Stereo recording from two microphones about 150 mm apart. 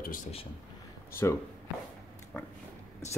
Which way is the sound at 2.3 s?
10° left (ahead or behind).